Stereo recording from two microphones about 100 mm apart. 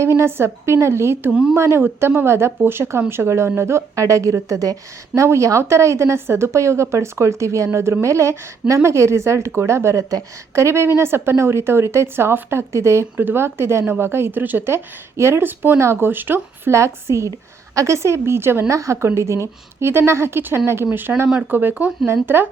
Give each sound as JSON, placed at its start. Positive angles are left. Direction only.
{"t": 0.2, "sound": "a woman's voice", "side_deg": -25}